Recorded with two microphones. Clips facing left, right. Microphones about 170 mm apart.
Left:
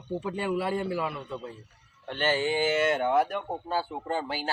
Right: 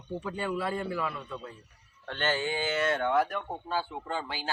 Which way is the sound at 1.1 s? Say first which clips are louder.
Left 3 dB; 15° left (ahead or behind).